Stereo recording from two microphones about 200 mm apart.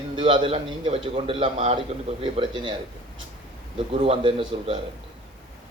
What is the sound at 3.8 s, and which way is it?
A man's voice, 25° right (ahead or behind).